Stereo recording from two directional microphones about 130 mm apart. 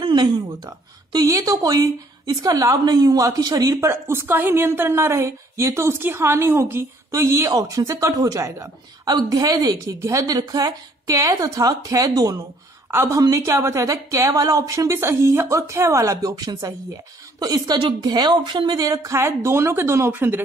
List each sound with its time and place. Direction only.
0.0 s a woman's voice: 35° right (ahead or behind); by 20.4 s 15° right (ahead or behind)